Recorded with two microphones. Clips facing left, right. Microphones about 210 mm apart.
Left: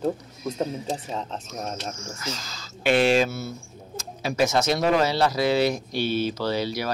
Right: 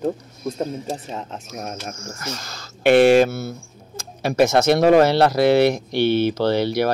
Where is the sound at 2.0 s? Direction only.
55° right (ahead or behind).